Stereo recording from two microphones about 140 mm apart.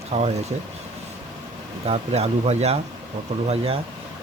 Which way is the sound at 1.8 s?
50° right (ahead or behind).